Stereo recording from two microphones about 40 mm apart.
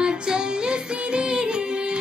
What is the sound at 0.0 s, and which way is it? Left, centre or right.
Music, right.